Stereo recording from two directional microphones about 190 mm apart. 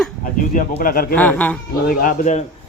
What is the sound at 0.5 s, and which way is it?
Speech, 45° left (ahead or behind).